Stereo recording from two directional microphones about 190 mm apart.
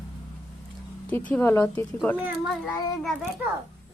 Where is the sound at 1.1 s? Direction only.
10° left (ahead or behind).